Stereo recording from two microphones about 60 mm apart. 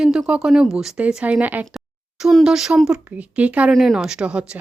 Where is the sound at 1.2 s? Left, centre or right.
Right.